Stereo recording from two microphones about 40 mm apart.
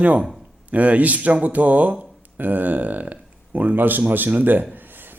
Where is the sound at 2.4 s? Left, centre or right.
Right.